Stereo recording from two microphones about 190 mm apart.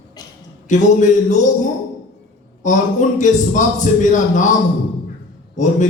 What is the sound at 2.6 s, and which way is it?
Speech, 40° left (ahead or behind).